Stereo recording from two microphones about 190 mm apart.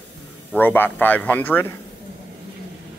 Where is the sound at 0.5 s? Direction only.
10° left (ahead or behind).